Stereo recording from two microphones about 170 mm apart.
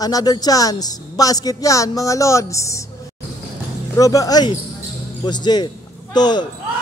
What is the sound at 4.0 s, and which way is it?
Speech, 20° left (ahead or behind).